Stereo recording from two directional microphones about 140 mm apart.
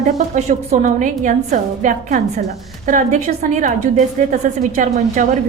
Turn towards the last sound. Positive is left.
turn(degrees=-70)  # may be behind; listen again after turning